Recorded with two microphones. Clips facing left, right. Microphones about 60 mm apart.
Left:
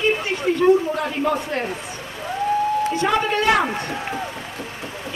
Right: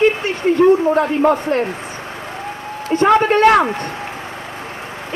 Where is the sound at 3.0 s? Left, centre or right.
Right.